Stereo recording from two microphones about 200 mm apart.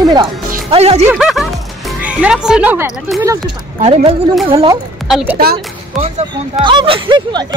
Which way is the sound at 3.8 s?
30° right (ahead or behind).